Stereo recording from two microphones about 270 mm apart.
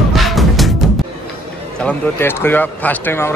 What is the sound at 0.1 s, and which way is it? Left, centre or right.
Music, centre.